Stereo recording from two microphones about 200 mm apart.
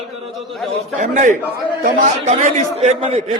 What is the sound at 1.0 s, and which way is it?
A man's voice, 40° right (ahead or behind).